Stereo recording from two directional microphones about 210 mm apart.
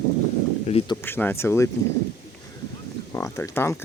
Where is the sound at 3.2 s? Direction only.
15° left (ahead or behind).